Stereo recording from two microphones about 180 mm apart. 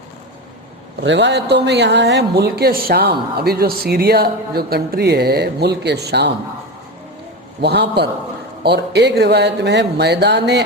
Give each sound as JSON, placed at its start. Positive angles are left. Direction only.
{"t": 1.0, "sound": "speech", "side_deg": -80}
{"t": 7.6, "sound": "speech", "side_deg": -65}